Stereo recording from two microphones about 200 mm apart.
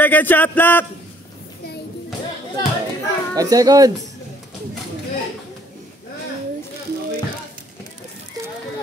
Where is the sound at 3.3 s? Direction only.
20° right (ahead or behind).